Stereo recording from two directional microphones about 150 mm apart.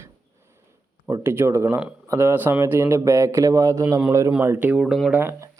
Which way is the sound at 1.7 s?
10° right (ahead or behind).